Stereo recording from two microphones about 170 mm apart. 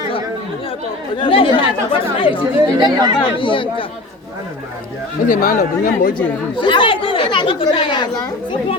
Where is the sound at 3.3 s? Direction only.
30° left (ahead or behind).